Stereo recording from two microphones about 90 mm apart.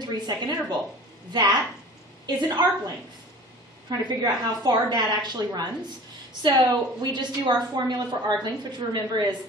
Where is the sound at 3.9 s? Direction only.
50° right (ahead or behind).